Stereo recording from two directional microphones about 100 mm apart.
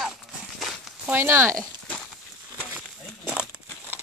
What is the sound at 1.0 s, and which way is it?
Speech, 25° right (ahead or behind).